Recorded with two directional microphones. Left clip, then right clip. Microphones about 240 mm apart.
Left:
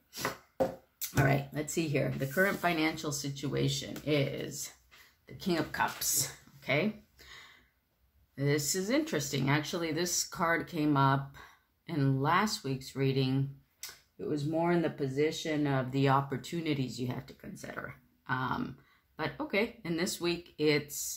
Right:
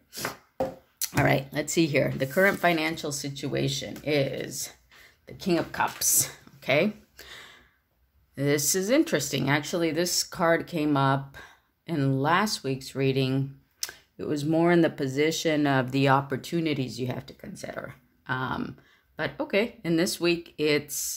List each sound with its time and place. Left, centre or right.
0.9 s speech: right
14.1 s speech: right